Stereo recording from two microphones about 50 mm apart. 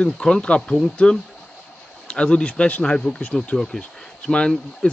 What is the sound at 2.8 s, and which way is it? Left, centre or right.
Speech, centre.